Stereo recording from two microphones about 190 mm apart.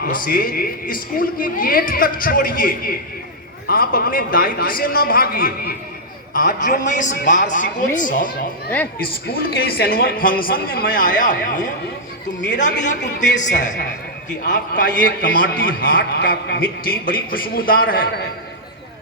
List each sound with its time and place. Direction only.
0.0 s a woman's voice: 50° left (ahead or behind)
9.2 s a woman's voice: 55° left (ahead or behind)